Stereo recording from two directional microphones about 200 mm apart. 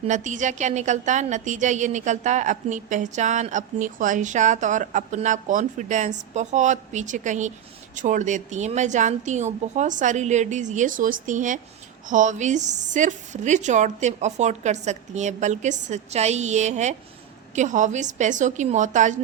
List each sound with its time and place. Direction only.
0.0 s a woman's voice: 40° right (ahead or behind)